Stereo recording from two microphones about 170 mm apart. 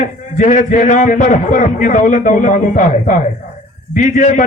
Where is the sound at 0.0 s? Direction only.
45° left (ahead or behind).